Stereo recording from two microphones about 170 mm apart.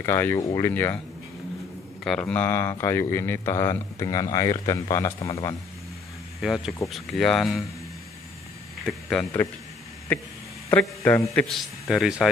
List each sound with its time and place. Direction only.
0.0 s a man's voice: 15° left (ahead or behind)
2.0 s a man's voice: 5° left (ahead or behind)
6.4 s speech: centre (ahead or behind)
8.8 s a man's voice: 5° left (ahead or behind)